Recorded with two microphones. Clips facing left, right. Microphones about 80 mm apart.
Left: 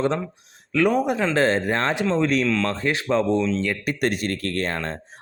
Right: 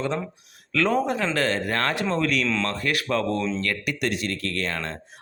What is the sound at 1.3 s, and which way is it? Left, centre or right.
Speech, left.